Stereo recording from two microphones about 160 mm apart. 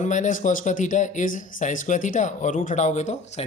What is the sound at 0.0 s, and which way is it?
Speech, 50° left (ahead or behind).